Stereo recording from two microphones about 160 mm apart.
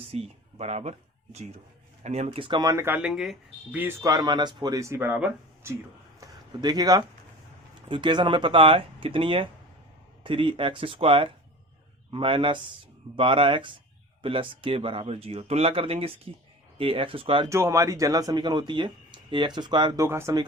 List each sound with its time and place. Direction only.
0.1 s speech: 40° right (ahead or behind); by 3.1 s 15° right (ahead or behind)
3.1 s speech: 5° right (ahead or behind)
6.1 s a sound: 25° right (ahead or behind)
7.9 s speech: 30° right (ahead or behind)
17.5 s speech: 20° right (ahead or behind)